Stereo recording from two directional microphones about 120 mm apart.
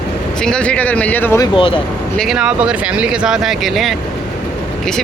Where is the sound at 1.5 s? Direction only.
45° left (ahead or behind).